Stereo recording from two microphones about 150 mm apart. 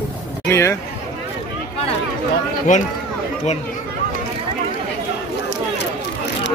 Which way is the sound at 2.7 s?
60° left (ahead or behind).